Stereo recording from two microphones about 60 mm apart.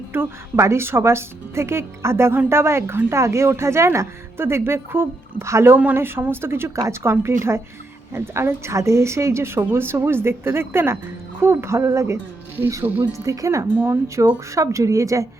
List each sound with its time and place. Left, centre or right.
0.1 s a woman's voice: right
5.7 s a woman's voice: right
13.1 s speech: right
13.7 s a woman's voice: right
14.3 s speech: right